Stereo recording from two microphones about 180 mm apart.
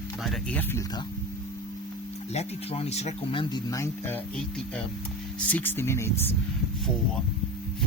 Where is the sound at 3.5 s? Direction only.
15° left (ahead or behind).